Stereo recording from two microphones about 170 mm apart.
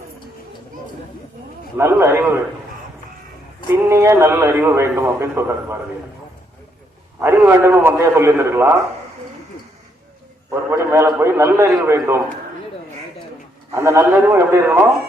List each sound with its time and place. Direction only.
1.8 s a man's voice: 15° right (ahead or behind)
3.8 s a man's voice: 15° right (ahead or behind)
7.2 s a man's voice: 15° right (ahead or behind)
10.5 s a man's voice: 15° right (ahead or behind)
13.7 s a man's voice: 15° right (ahead or behind)